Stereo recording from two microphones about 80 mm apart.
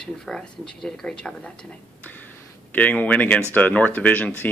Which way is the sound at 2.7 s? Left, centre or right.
Centre.